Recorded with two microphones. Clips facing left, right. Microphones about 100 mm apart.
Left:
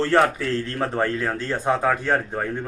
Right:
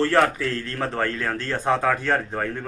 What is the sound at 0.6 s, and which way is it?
A man's voice, 20° left (ahead or behind).